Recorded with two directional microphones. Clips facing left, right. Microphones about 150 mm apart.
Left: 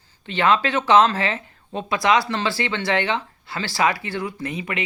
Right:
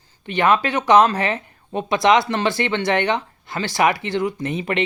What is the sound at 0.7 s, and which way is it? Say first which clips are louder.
Speech: right 2 dB; 15° right (ahead or behind).